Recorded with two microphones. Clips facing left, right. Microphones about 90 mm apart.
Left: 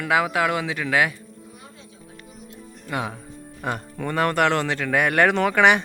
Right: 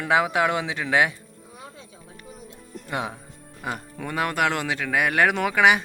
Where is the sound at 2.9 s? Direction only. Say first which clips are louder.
Left 1 dB; 20° right (ahead or behind).